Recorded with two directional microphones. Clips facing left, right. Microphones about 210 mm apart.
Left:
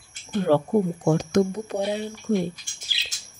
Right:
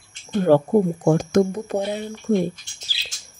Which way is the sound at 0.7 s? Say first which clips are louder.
Right 4 dB; 55° right (ahead or behind).